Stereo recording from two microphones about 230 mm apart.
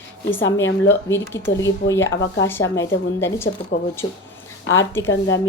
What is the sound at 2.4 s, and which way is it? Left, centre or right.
A woman's voice, centre.